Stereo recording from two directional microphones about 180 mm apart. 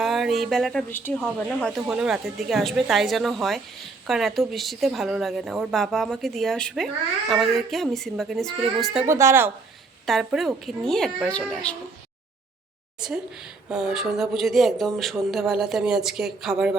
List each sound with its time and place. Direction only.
0.0 s a woman's voice: centre (ahead or behind)
9.0 s speech: 15° right (ahead or behind)
10.1 s a woman's voice: centre (ahead or behind)
13.7 s a woman's voice: centre (ahead or behind)